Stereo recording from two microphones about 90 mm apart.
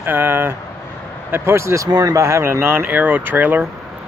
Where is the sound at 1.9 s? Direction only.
50° right (ahead or behind).